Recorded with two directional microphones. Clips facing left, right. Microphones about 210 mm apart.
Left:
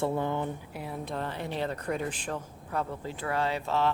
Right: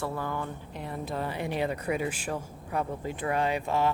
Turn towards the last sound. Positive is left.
turn(degrees=-15)  # may be behind; listen again after turning